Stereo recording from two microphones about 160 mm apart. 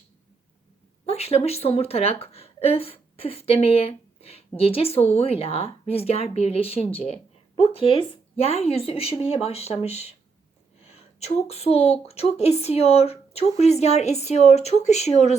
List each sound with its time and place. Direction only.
1.0 s a woman's voice: 40° left (ahead or behind)